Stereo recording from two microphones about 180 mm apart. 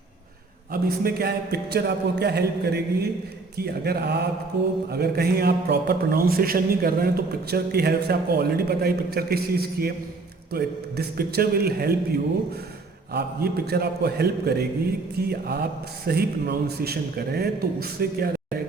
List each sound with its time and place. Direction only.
0.7 s a man's voice: 60° right (ahead or behind)
13.1 s a man's voice: 60° right (ahead or behind)